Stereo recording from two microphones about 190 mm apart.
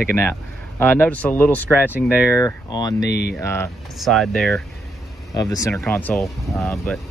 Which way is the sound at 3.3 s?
15° left (ahead or behind).